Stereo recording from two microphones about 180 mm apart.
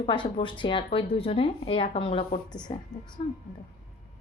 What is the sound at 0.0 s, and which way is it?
A woman's voice, 30° left (ahead or behind).